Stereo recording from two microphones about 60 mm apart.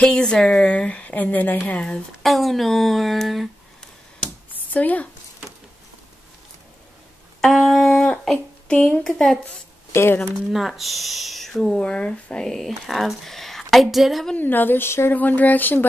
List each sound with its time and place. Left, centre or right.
0.0 s a woman's voice: centre
2.2 s speech: centre
4.5 s a sound: left
7.4 s a woman's voice: centre
9.9 s speech: left
10.5 s speech: centre
14.3 s speech: left
15.1 s a woman's voice: left